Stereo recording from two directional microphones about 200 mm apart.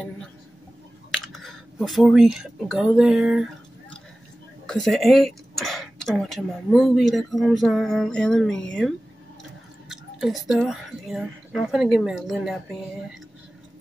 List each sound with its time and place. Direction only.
1.1 s a sound: centre (ahead or behind)
4.6 s speech: centre (ahead or behind)
10.2 s speech: centre (ahead or behind)